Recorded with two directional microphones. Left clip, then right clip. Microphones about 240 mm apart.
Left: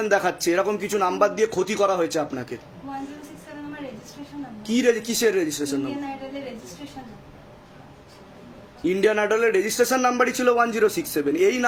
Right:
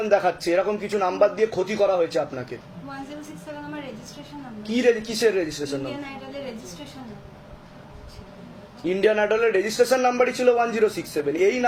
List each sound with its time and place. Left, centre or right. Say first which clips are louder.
0.0 s a man's voice: right 1 dB; left
4.6 s a man's voice: even; left
8.8 s a man's voice: even; left